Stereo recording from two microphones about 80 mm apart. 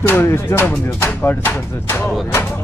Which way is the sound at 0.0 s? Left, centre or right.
Left.